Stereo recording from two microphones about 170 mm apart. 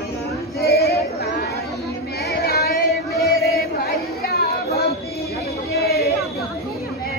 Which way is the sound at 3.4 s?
65° left (ahead or behind).